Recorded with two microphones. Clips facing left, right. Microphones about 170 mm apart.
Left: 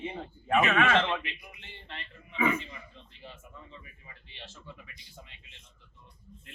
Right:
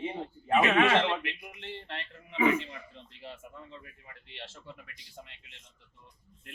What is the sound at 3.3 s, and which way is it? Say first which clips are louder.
Speech: right 6 dB; 65° right (ahead or behind).